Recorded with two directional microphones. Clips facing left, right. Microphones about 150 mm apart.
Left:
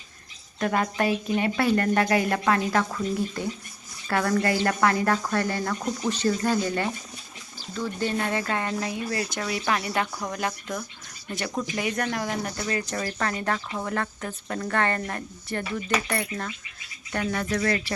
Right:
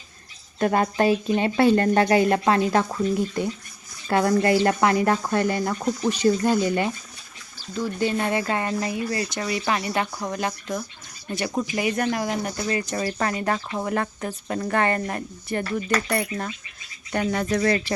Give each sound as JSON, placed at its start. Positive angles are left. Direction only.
{"t": 0.6, "sound": "speech", "side_deg": -30}
{"t": 15.6, "sound": "mechanisms", "side_deg": 5}
{"t": 16.0, "sound": "speech", "side_deg": -10}
{"t": 17.1, "sound": "speech", "side_deg": -20}